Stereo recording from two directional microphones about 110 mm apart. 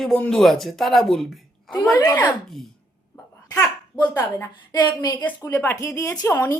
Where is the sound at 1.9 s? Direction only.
35° left (ahead or behind).